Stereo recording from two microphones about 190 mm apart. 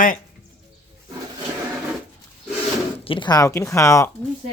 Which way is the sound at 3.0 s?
25° left (ahead or behind).